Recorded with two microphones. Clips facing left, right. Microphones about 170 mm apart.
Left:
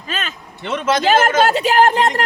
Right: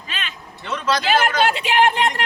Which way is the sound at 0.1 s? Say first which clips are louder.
Left 7 dB; 45° left (ahead or behind).